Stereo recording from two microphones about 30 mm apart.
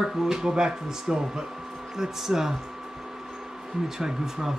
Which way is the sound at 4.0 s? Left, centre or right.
Centre.